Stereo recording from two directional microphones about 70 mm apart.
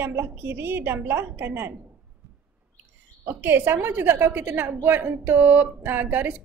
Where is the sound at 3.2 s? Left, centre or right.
Right.